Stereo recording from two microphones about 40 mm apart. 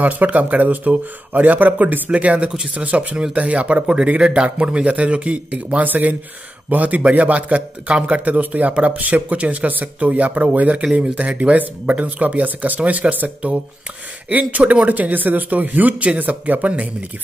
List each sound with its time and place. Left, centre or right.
0.0 s speech: right
2.0 s a man's voice: right
5.9 s a man's voice: right
14.5 s speech: right